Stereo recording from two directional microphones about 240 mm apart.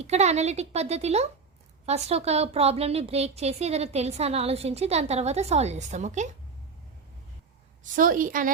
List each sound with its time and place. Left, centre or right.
0.0 s a woman's voice: right
7.9 s a woman's voice: right